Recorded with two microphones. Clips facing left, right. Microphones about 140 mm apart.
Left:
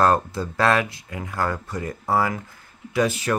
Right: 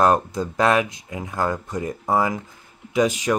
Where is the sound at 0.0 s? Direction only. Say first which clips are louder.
Right 1 dB; 15° right (ahead or behind).